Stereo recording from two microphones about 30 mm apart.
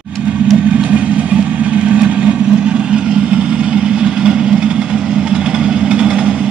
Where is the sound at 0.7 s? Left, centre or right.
Right.